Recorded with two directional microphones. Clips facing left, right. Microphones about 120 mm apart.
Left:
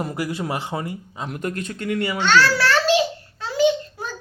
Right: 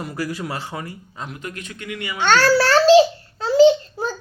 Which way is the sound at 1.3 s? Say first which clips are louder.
Left 6 dB; 45° left (ahead or behind).